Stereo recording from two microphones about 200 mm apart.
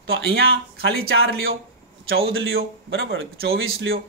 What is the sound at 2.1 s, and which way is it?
Speech, 85° right.